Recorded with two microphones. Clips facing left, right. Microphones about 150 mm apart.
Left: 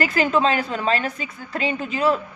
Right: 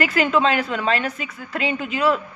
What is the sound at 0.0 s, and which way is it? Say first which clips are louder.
A woman's voice: right 1 dB; 35° left (ahead or behind).